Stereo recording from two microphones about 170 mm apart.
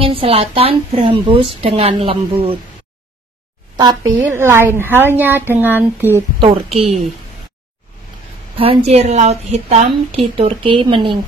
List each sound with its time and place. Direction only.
0.0 s a woman's voice: 35° right (ahead or behind)
3.7 s a woman's voice: 20° right (ahead or behind)
6.4 s a woman's voice: 35° right (ahead or behind)
8.5 s a woman's voice: 35° right (ahead or behind)